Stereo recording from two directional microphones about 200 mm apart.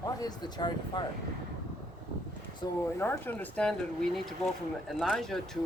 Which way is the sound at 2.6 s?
20° left (ahead or behind).